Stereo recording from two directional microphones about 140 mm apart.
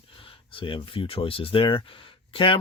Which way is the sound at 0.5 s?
40° left (ahead or behind).